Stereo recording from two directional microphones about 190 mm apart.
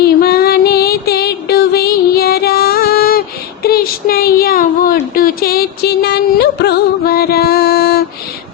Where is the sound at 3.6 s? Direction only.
55° left (ahead or behind).